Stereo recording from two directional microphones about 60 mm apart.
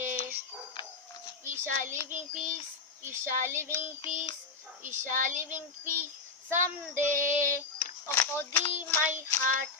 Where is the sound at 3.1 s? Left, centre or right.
Right.